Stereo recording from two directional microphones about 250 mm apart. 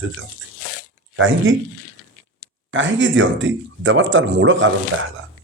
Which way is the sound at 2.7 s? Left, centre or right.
Right.